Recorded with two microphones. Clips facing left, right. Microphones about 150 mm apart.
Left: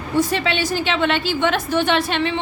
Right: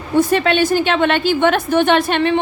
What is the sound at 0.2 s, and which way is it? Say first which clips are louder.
A woman's voice: right 6 dB; 50° right (ahead or behind).